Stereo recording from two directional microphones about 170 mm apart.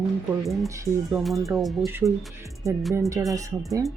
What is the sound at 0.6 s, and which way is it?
Speech, 20° right (ahead or behind).